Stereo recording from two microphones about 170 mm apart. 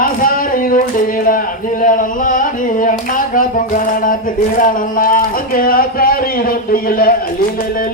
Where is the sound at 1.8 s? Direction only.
50° left (ahead or behind).